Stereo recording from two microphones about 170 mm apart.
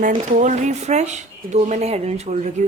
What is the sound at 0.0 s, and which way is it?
Speech, 50° right (ahead or behind).